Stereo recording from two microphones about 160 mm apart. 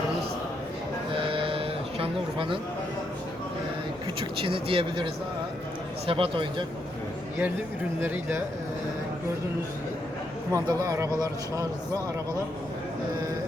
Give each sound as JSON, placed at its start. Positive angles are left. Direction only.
{"t": 1.1, "sound": "sheep", "side_deg": -35}
{"t": 4.2, "sound": "speech", "side_deg": -35}
{"t": 8.0, "sound": "speech", "side_deg": -10}
{"t": 10.5, "sound": "a man's voice", "side_deg": -20}